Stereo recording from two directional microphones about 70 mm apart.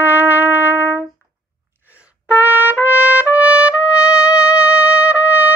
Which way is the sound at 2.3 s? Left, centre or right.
Right.